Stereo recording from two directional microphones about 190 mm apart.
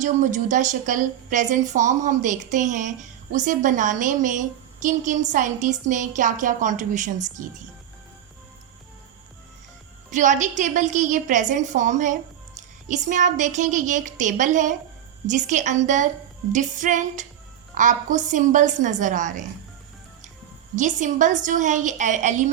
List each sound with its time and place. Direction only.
0.0 s a woman's voice: 40° right (ahead or behind)
10.1 s a woman's voice: 40° right (ahead or behind)
20.7 s a woman's voice: 40° right (ahead or behind)